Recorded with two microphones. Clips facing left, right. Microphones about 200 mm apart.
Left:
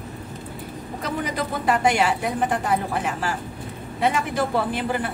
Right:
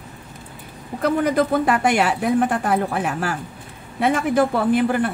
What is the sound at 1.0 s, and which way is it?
A woman's voice, 55° right (ahead or behind).